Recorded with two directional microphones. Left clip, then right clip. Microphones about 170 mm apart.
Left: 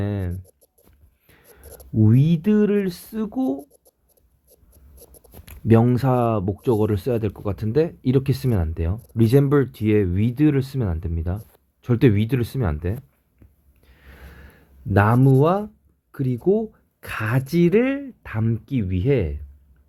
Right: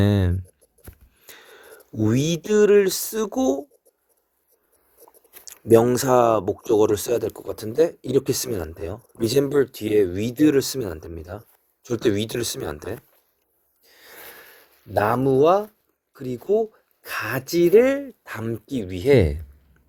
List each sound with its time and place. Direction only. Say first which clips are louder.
0.0 s speech: right 7 dB; 30° right (ahead or behind)
5.6 s speech: right 3 dB; 30° right (ahead or behind)
13.8 s a sound: right 5 dB; 35° right (ahead or behind)
14.9 s speech: even; 30° right (ahead or behind)